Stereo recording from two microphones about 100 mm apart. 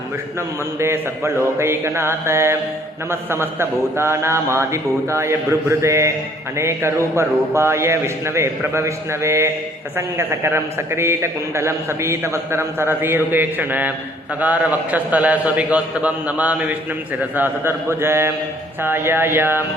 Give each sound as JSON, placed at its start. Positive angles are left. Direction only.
{"t": 0.8, "sound": "a man's voice", "side_deg": -25}